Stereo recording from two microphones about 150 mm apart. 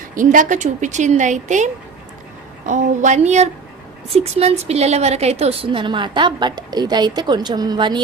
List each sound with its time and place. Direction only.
0.1 s a woman's voice: 60° right (ahead or behind); by 8.0 s 30° right (ahead or behind)